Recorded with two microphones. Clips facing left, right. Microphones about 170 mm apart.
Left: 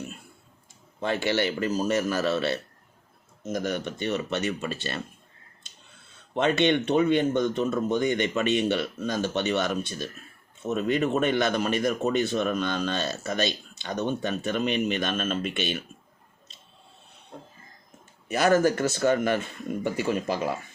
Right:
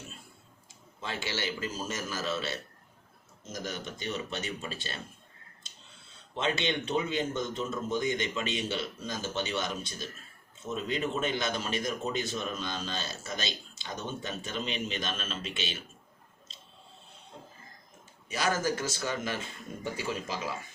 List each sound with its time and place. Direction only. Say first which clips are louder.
0.9 s speech: left 10 dB; 60° left (ahead or behind)
18.3 s speech: left 9 dB; 60° left (ahead or behind)